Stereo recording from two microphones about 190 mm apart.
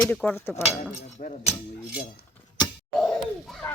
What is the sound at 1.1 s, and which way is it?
Speech, 40° left (ahead or behind).